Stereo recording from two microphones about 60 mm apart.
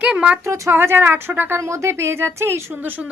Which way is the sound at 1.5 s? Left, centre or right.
Right.